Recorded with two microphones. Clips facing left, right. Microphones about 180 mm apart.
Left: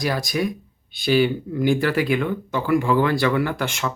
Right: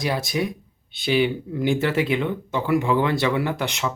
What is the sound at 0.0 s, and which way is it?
Speech, 25° right (ahead or behind).